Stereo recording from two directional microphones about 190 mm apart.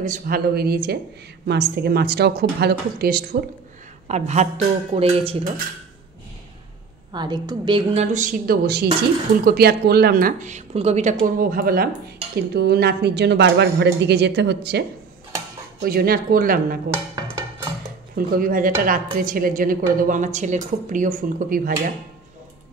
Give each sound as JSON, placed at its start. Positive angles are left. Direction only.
{"t": 0.0, "sound": "a woman's voice", "side_deg": -50}
{"t": 4.1, "sound": "a woman's voice", "side_deg": -35}
{"t": 7.1, "sound": "a woman's voice", "side_deg": -25}
{"t": 11.2, "sound": "a woman's voice", "side_deg": -50}
{"t": 18.1, "sound": "a woman's voice", "side_deg": -50}